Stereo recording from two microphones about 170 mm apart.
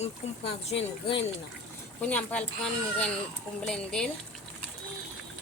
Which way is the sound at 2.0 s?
10° left (ahead or behind).